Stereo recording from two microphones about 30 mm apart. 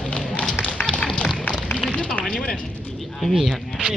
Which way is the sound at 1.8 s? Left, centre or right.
Right.